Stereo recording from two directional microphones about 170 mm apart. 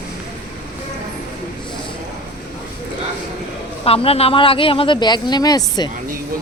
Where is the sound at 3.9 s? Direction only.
35° left (ahead or behind).